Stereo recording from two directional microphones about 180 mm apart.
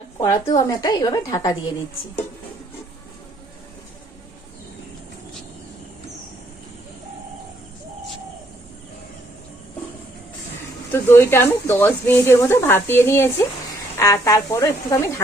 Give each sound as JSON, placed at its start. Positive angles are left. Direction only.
{"t": 0.2, "sound": "a woman's voice", "side_deg": 20}
{"t": 10.9, "sound": "speech", "side_deg": 15}